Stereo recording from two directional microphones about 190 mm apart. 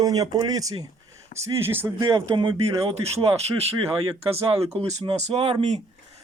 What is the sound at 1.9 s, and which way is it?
Speech, 25° right (ahead or behind).